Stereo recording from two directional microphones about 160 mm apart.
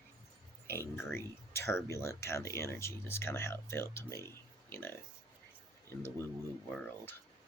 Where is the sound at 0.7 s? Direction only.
15° left (ahead or behind).